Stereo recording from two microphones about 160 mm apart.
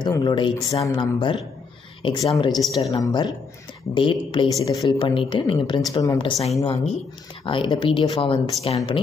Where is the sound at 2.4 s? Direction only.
25° left (ahead or behind).